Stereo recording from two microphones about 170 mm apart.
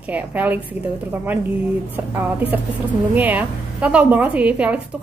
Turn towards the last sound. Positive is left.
turn(degrees=-10)  # may be behind; listen again after turning